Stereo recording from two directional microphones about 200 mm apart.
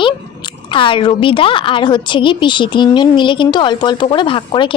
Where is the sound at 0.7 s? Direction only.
25° left (ahead or behind).